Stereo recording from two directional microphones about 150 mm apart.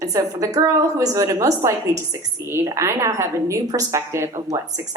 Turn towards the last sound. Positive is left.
turn(degrees=-20)  # may be behind; listen again after turning